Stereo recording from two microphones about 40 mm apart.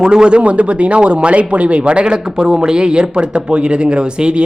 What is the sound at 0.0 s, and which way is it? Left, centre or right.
Speech, right.